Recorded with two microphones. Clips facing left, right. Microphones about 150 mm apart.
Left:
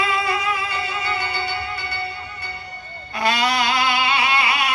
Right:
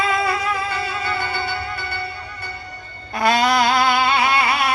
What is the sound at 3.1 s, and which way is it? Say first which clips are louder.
Music: right 4 dB; 45° right (ahead or behind).